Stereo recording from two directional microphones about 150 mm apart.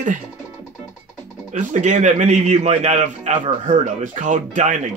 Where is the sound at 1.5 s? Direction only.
50° right (ahead or behind).